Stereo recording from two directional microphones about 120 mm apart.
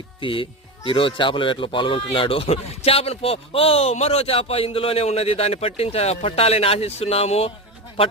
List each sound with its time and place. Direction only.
0.2 s a man's voice: 45° left (ahead or behind)